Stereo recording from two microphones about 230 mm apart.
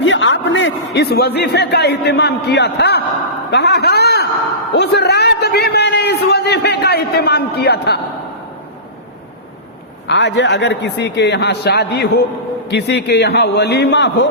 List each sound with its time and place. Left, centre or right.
0.0 s a man's voice: left
10.1 s a man's voice: left